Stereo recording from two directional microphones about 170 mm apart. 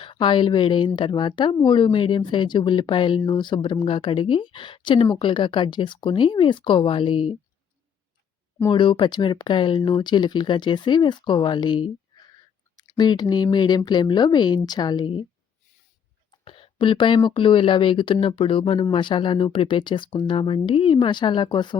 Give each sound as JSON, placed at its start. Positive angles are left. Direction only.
{"t": 0.0, "sound": "speech", "side_deg": 30}
{"t": 8.7, "sound": "speech", "side_deg": 30}
{"t": 13.0, "sound": "speech", "side_deg": 25}
{"t": 16.4, "sound": "a sound", "side_deg": 30}
{"t": 17.2, "sound": "speech", "side_deg": 30}